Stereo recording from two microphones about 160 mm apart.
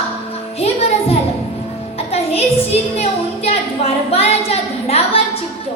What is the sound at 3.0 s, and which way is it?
A woman's voice, 40° left (ahead or behind).